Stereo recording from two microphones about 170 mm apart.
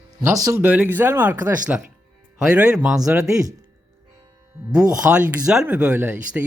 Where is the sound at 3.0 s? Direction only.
20° right (ahead or behind).